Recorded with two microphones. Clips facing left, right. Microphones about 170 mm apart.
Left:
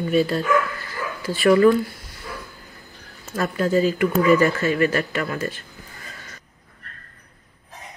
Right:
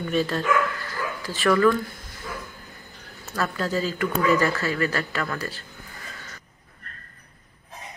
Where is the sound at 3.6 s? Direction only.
15° left (ahead or behind).